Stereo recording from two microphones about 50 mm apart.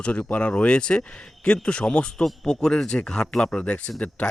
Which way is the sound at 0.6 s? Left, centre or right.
Left.